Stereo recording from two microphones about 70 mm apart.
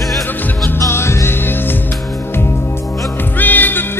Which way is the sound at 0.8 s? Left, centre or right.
Left.